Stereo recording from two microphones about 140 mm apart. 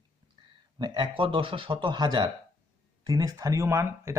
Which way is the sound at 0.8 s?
35° right (ahead or behind).